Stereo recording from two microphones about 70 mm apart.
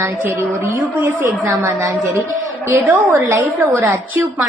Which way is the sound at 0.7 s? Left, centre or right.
Right.